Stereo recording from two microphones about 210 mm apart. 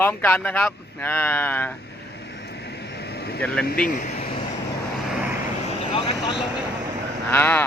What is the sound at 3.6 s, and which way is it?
Speech, 40° left (ahead or behind).